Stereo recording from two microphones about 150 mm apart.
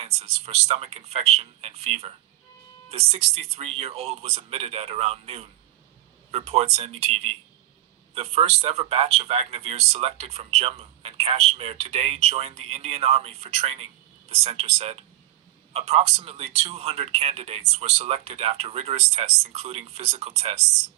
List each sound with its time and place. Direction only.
0.0 s speech: 40° right (ahead or behind)